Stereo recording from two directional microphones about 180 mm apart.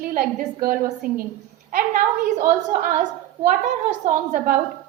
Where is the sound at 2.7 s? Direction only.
45° right (ahead or behind).